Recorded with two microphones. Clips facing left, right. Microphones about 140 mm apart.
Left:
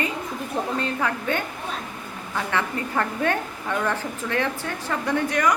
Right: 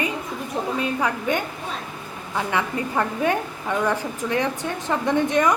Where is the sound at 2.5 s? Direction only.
15° right (ahead or behind).